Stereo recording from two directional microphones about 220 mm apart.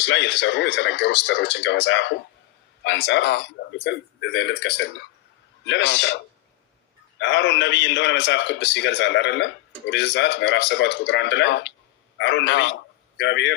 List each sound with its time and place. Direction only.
0.0 s a man's voice: 50° left (ahead or behind)
7.2 s a man's voice: 55° left (ahead or behind)